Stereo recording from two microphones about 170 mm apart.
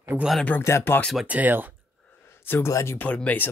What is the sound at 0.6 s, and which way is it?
Speech, 15° left (ahead or behind).